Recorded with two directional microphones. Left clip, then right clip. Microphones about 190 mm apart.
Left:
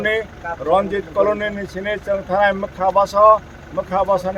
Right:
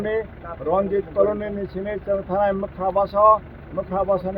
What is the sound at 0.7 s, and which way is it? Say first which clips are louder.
Speech: left 3 dB; 10° left (ahead or behind).